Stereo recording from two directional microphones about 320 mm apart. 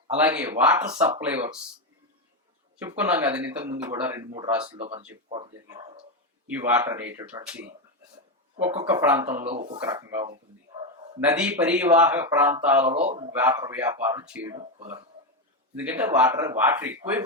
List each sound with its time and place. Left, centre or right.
0.2 s speech: centre
2.7 s speech: centre
8.6 s speech: centre
9.5 s a man's voice: centre
12.8 s a man's voice: centre
13.3 s speech: centre
15.7 s speech: centre